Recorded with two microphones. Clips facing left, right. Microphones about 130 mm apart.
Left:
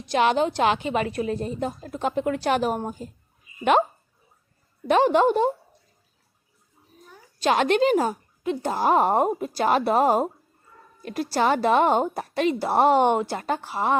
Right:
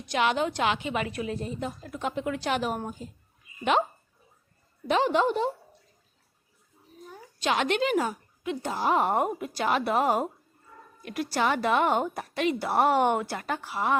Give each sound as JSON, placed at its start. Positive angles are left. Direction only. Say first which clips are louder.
{"t": 0.1, "sound": "a woman's voice", "louder": "left 5 dB", "side_deg": 35}
{"t": 3.6, "sound": "a woman's voice", "louder": "left 5 dB", "side_deg": 50}
{"t": 4.9, "sound": "a woman's voice", "louder": "left 5 dB", "side_deg": 50}
{"t": 7.3, "sound": "a woman's voice", "louder": "left 6 dB", "side_deg": 40}